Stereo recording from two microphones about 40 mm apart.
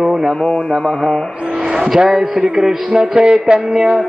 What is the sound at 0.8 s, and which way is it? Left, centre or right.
Speech, centre.